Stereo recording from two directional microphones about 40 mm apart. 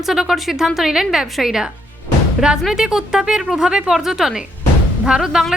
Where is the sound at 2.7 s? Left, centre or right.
Centre.